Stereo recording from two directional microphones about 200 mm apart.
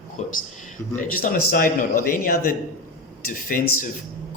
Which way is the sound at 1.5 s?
45° left (ahead or behind).